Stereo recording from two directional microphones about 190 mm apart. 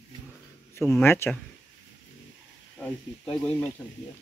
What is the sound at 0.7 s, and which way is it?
Speech, 15° left (ahead or behind).